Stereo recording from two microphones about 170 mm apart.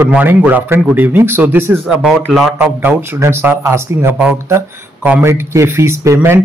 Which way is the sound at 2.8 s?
10° right (ahead or behind).